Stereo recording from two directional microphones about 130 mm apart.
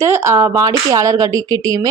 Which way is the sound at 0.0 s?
20° right (ahead or behind).